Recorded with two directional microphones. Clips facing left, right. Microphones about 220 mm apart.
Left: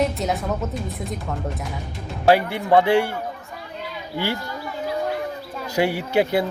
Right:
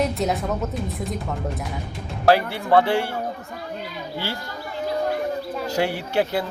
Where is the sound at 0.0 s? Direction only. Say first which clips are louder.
Even; centre (ahead or behind).